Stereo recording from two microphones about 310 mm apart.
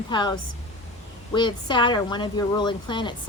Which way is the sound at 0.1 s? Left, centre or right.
Centre.